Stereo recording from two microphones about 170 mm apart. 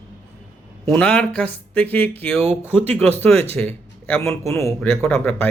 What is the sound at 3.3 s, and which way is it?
Speech, 35° right (ahead or behind).